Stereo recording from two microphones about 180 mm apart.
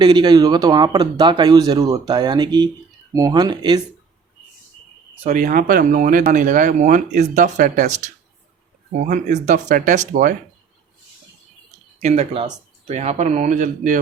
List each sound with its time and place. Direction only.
0.0 s speech: 25° right (ahead or behind)
5.2 s speech: 45° right (ahead or behind)
9.0 s speech: 45° right (ahead or behind)
11.9 s speech: 35° right (ahead or behind)